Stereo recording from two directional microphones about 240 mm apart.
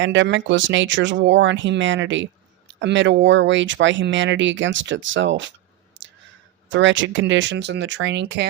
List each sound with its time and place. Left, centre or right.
0.0 s speech: right
6.0 s clicking: right
6.7 s speech: right